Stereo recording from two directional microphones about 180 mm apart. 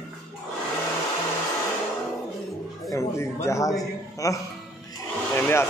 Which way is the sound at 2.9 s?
15° left (ahead or behind).